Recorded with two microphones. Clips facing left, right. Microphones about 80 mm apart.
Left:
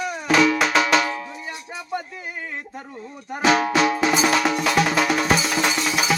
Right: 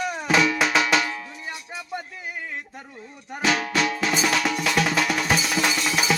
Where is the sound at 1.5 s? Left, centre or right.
Left.